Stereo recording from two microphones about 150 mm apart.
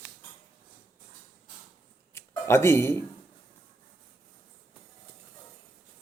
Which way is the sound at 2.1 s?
15° left (ahead or behind).